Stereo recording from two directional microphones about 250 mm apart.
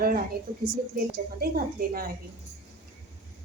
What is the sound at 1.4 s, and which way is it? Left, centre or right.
Speech, right.